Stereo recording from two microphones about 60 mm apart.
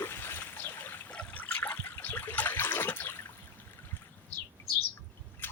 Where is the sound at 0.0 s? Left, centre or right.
Left.